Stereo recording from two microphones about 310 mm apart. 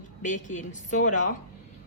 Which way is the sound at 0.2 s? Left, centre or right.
Left.